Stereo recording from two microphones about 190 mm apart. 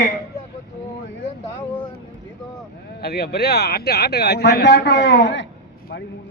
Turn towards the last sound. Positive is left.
turn(degrees=70)  # may be behind; listen again after turning